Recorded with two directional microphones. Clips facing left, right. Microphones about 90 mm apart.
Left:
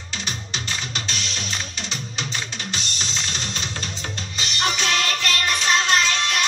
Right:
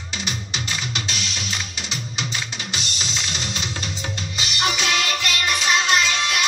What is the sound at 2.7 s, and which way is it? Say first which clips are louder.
Music: right 2 dB; 10° right (ahead or behind).